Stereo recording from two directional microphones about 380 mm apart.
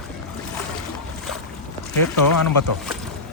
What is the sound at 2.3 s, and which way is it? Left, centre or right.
Speech, left.